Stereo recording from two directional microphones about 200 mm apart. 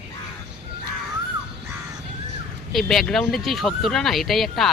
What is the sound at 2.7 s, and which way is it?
Speech, centre (ahead or behind).